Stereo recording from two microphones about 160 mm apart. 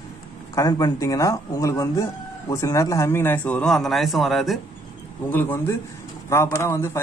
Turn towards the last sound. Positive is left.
turn(degrees=15)  # may be behind; listen again after turning